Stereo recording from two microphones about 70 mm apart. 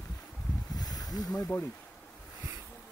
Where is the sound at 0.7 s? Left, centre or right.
Left.